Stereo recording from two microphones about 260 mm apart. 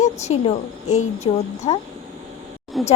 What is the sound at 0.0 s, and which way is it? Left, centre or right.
A woman's voice, left.